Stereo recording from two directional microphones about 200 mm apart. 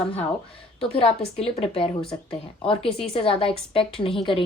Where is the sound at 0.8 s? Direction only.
30° left (ahead or behind).